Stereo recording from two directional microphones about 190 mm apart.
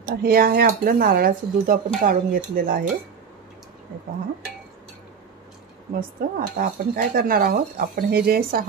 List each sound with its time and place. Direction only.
0.0 s speech: 55° right (ahead or behind)
5.9 s speech: 50° right (ahead or behind)